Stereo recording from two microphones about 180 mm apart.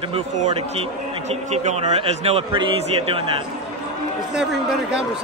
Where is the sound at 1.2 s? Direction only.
35° right (ahead or behind).